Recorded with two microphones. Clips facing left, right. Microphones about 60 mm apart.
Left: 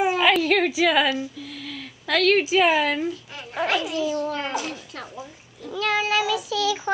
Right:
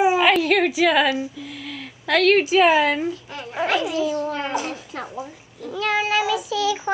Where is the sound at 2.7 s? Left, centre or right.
Centre.